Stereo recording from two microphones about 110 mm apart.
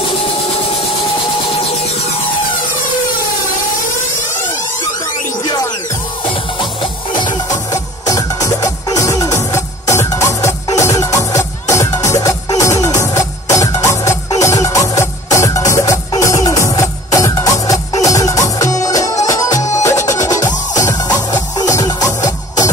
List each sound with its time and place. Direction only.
5.4 s music: 40° left (ahead or behind)
6.8 s music: 45° left (ahead or behind)
7.7 s music: 30° left (ahead or behind)